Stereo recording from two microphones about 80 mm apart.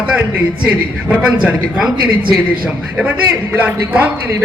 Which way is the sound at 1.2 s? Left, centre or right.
Centre.